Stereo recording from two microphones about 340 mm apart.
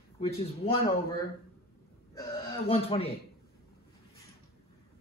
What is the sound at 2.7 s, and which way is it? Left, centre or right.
Speech, centre.